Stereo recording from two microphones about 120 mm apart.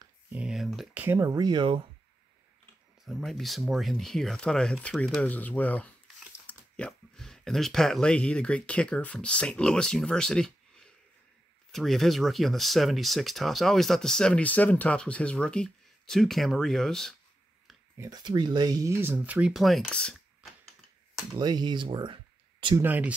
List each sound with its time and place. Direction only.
0.3 s a sound: 5° right (ahead or behind)
0.9 s speech: 20° right (ahead or behind)
1.3 s speech: 35° right (ahead or behind)
3.1 s speech: centre (ahead or behind)
5.2 s speech: 15° left (ahead or behind)
17.9 s speech: 25° right (ahead or behind)
18.2 s speech: 40° right (ahead or behind)
19.1 s speech: 10° right (ahead or behind)
19.5 s speech: centre (ahead or behind)
21.4 s speech: 35° right (ahead or behind)
22.8 s speech: 15° right (ahead or behind)